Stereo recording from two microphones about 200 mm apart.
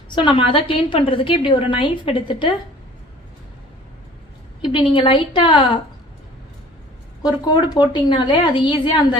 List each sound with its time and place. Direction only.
0.2 s a woman's voice: 25° left (ahead or behind)
4.6 s a woman's voice: 25° left (ahead or behind)
7.2 s a woman's voice: 20° left (ahead or behind)